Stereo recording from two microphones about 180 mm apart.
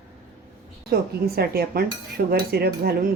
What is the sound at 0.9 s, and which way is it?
Cutlery, 60° right (ahead or behind).